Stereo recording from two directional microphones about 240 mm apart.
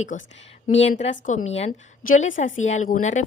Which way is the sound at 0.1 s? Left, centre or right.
Left.